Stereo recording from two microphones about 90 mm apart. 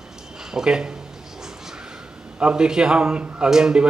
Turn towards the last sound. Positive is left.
turn(degrees=-10)  # may be behind; listen again after turning